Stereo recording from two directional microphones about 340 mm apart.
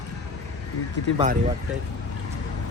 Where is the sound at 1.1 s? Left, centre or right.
Right.